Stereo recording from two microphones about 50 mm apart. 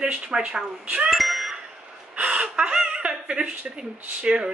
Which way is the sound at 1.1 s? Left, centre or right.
Centre.